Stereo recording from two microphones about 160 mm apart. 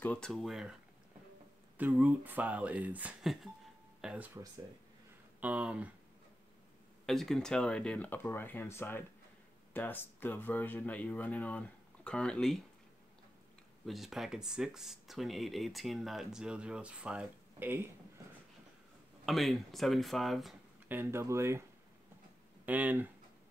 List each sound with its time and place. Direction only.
0.0 s speech: 5° left (ahead or behind)
1.8 s speech: 10° right (ahead or behind)
5.4 s speech: 10° right (ahead or behind)
7.1 s speech: centre (ahead or behind)
13.8 s speech: centre (ahead or behind)
19.2 s speech: centre (ahead or behind)
20.9 s speech: 15° right (ahead or behind)
22.7 s speech: 10° right (ahead or behind)